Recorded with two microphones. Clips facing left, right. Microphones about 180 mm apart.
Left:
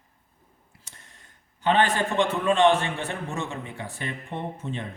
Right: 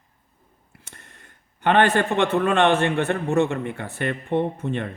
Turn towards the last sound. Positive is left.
turn(degrees=-60)  # may be behind; listen again after turning